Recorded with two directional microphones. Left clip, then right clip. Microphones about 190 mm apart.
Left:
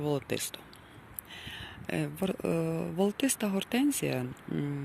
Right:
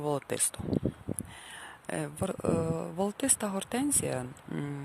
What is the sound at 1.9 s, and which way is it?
Speech, 10° right (ahead or behind).